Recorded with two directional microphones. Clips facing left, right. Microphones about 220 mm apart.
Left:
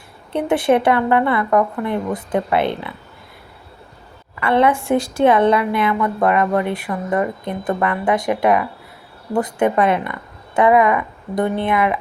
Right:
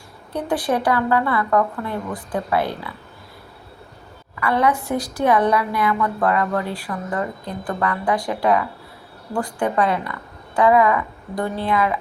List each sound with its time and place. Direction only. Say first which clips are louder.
0.3 s a woman's voice: left 6 dB; 25° left (ahead or behind)
4.4 s a woman's voice: left 4 dB; 25° left (ahead or behind)